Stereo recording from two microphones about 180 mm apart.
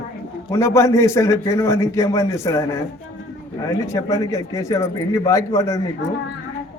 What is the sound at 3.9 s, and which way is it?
A man's voice, 15° left (ahead or behind).